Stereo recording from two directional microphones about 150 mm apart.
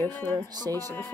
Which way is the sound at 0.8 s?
15° left (ahead or behind).